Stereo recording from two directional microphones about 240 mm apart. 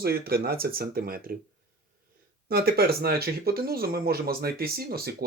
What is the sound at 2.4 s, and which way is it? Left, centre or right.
Speech, right.